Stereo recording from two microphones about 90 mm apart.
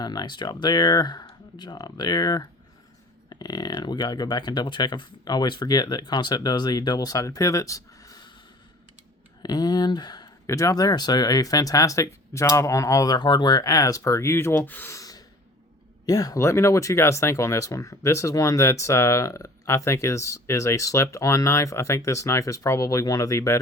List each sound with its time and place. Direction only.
0.0 s speech: 50° left (ahead or behind)
9.4 s speech: 50° left (ahead or behind)
10.4 s speech: 35° left (ahead or behind); by 14.9 s 20° left (ahead or behind)
14.9 s a sound: 45° left (ahead or behind)
16.0 s speech: 40° left (ahead or behind)